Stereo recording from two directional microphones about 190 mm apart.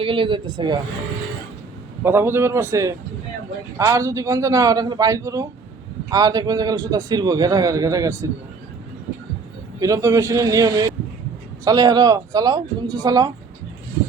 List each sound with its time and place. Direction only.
0.0 s a man's voice: 25° right (ahead or behind)
2.0 s a man's voice: 10° right (ahead or behind)
9.8 s a man's voice: 15° right (ahead or behind)